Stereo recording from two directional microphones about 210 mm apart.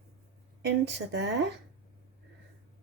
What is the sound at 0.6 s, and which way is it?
Speech, 55° right (ahead or behind).